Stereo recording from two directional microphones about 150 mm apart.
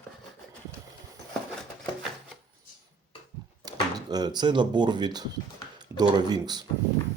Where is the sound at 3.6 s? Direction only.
25° right (ahead or behind).